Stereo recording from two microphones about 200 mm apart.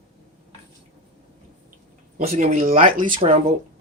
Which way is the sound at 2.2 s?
40° right (ahead or behind).